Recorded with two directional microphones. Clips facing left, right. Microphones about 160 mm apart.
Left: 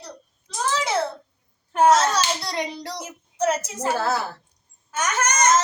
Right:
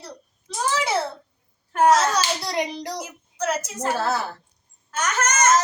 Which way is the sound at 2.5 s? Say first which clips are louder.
Right 2 dB; 15° right (ahead or behind).